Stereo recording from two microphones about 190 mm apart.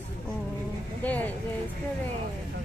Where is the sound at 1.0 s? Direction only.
10° left (ahead or behind).